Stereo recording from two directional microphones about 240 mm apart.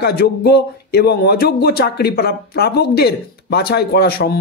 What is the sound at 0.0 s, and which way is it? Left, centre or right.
Speech, left.